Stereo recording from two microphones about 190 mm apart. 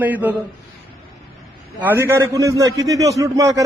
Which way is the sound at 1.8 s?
10° right (ahead or behind).